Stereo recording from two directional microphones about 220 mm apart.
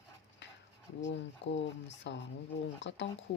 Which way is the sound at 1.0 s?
55° left (ahead or behind).